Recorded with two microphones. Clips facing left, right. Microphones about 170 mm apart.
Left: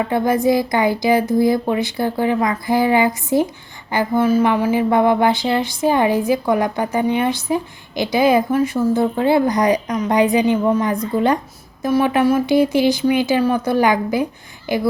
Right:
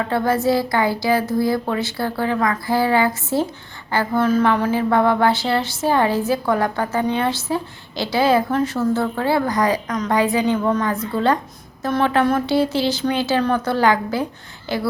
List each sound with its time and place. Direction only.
0.1 s speech: 15° left (ahead or behind)